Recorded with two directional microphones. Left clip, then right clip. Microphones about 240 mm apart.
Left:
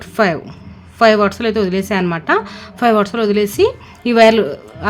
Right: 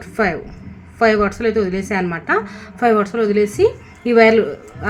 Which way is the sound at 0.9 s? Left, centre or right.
Left.